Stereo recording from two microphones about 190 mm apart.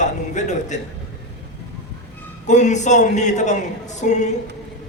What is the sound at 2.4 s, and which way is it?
A man's voice, 40° left (ahead or behind).